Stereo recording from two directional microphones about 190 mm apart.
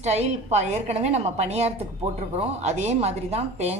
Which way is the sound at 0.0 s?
35° right (ahead or behind).